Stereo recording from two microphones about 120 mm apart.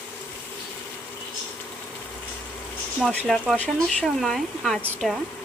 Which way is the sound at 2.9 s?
Centre (ahead or behind).